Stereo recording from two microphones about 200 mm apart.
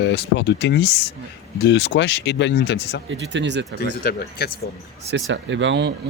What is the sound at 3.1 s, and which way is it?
Speech, 65° right (ahead or behind).